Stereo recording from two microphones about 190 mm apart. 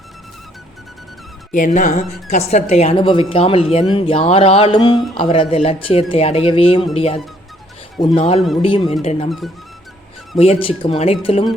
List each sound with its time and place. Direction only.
1.5 s speech: 40° left (ahead or behind)
10.3 s speech: 30° left (ahead or behind)